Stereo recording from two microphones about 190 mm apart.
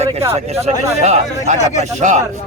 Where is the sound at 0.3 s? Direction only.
35° right (ahead or behind).